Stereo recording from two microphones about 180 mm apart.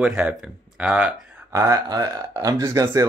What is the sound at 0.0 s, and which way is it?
Speech, 5° right (ahead or behind).